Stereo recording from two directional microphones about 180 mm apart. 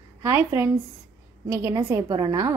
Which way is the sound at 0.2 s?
15° right (ahead or behind).